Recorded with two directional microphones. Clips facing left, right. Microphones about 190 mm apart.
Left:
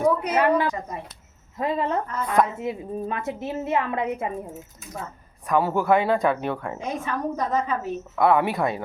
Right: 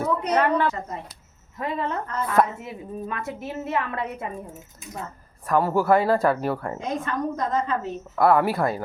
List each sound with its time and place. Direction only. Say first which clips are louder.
0.2 s a woman's voice: even; 10° left (ahead or behind)
1.5 s a woman's voice: left 3 dB; 25° left (ahead or behind)
5.5 s speech: right 1 dB; centre (ahead or behind)
6.7 s a woman's voice: right 1 dB; 10° left (ahead or behind)
8.2 s speech: right 1 dB; centre (ahead or behind)